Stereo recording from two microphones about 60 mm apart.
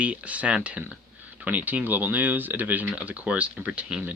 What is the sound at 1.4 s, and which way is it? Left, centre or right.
Speech, right.